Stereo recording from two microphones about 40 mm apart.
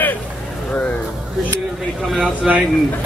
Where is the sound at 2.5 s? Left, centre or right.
Centre.